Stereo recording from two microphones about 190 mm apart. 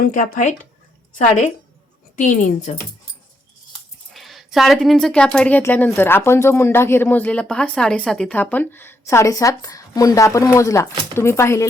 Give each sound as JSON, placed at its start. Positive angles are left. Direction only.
{"t": 0.0, "sound": "speech", "side_deg": 45}
{"t": 2.1, "sound": "a woman's voice", "side_deg": 40}
{"t": 4.1, "sound": "a woman's voice", "side_deg": 0}